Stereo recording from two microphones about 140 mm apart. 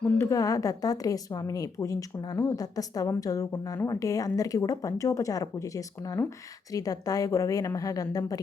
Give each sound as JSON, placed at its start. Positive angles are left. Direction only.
{"t": 0.2, "sound": "a woman's voice", "side_deg": 25}